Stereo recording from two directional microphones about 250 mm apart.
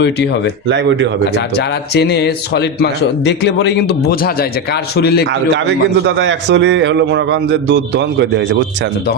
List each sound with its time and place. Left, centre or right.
0.7 s a man's voice: right
1.5 s a man's voice: left
5.3 s a man's voice: right